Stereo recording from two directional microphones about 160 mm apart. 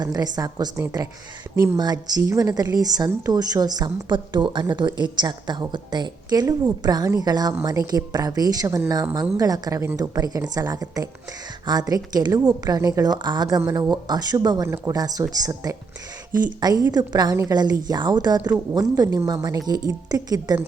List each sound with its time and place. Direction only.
0.0 s a woman's voice: 25° right (ahead or behind)
16.3 s speech: 55° right (ahead or behind)
16.6 s a woman's voice: 25° right (ahead or behind)